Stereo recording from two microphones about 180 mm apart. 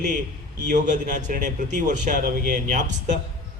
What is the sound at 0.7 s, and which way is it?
A man's voice, 45° right (ahead or behind).